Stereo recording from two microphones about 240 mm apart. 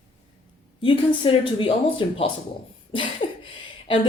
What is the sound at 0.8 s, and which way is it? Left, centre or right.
Speech, left.